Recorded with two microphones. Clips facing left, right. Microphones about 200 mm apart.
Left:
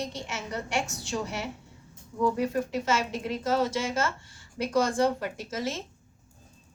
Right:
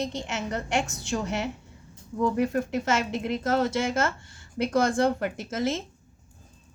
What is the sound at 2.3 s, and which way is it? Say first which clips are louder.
Speech: right 3 dB; 55° right (ahead or behind).